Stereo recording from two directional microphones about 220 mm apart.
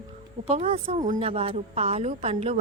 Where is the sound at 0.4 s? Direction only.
30° right (ahead or behind).